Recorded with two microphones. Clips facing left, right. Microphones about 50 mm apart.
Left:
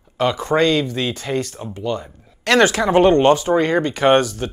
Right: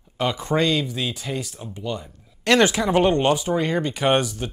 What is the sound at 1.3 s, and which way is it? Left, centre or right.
Speech, left.